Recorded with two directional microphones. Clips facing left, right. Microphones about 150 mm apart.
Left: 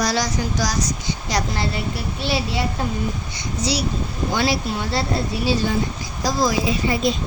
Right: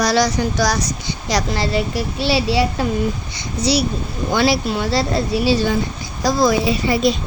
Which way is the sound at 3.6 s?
65° right (ahead or behind).